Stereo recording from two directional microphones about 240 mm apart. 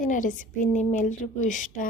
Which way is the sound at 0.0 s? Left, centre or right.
Left.